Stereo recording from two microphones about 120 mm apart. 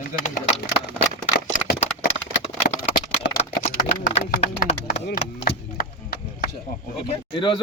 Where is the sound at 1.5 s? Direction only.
75° left (ahead or behind).